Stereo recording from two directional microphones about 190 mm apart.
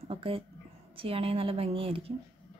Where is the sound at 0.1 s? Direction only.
30° right (ahead or behind).